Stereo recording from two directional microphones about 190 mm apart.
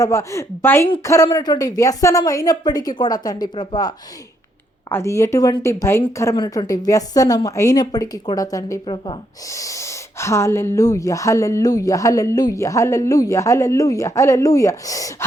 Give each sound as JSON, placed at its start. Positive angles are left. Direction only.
{"t": 0.0, "sound": "speech", "side_deg": 15}